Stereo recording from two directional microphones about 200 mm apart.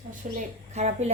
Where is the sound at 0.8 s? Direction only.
35° right (ahead or behind).